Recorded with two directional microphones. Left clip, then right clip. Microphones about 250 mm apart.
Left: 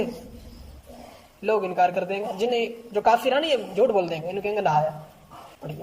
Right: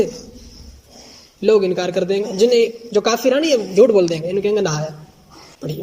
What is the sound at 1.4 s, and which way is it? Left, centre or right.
A man's voice, right.